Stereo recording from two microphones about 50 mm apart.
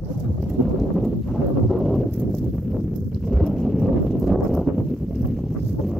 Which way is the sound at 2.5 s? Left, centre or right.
Centre.